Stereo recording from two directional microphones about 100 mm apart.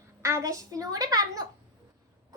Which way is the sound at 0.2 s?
30° right (ahead or behind).